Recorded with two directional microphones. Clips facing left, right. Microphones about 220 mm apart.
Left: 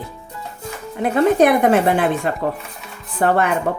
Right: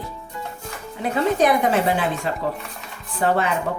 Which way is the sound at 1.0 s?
55° left (ahead or behind).